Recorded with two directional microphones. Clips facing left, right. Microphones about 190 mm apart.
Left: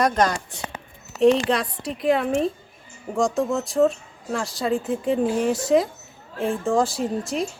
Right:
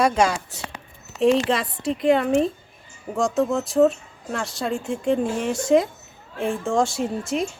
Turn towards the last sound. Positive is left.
turn(degrees=0)  # may be behind; listen again after turning